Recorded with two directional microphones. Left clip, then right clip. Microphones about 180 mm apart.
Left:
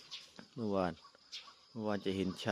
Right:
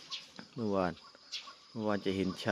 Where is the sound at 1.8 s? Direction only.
5° left (ahead or behind).